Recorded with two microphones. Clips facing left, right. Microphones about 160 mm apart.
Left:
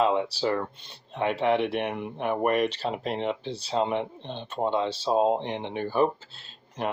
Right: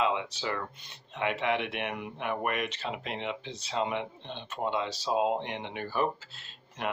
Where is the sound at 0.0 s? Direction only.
40° left (ahead or behind).